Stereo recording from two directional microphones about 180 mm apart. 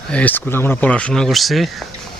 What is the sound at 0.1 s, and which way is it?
Speech, 10° left (ahead or behind).